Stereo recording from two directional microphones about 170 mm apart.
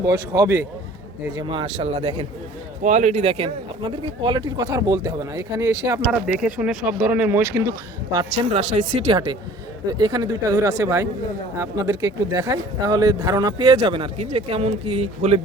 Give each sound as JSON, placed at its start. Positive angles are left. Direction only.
{"t": 0.0, "sound": "speech", "side_deg": -20}
{"t": 1.4, "sound": "speech", "side_deg": -30}
{"t": 6.1, "sound": "speech", "side_deg": -5}
{"t": 8.1, "sound": "speech", "side_deg": -25}
{"t": 8.6, "sound": "speech", "side_deg": -45}